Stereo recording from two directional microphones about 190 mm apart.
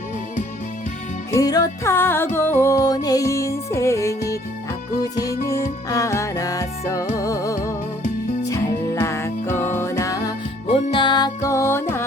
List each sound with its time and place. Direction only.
1.3 s music: 20° left (ahead or behind)
5.5 s music: 15° left (ahead or behind)
10.7 s music: 30° left (ahead or behind); by 12.0 s 10° left (ahead or behind)